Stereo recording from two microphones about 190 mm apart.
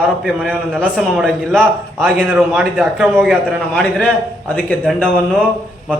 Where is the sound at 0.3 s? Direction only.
Centre (ahead or behind).